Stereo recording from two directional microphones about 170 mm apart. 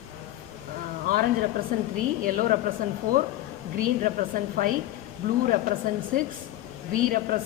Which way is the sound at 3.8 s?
55° right (ahead or behind).